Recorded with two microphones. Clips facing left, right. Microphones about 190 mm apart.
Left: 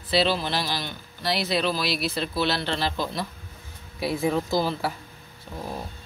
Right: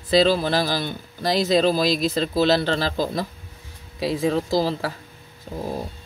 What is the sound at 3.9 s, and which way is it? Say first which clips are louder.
Speech: right 3 dB; 90° right.